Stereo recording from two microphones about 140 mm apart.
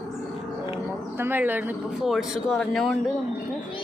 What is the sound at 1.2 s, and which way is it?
Speech, 15° right (ahead or behind).